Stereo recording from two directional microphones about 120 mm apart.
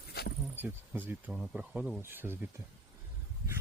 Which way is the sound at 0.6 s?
15° right (ahead or behind).